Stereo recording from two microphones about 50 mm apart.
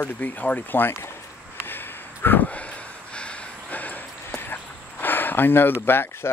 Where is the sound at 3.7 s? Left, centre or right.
Left.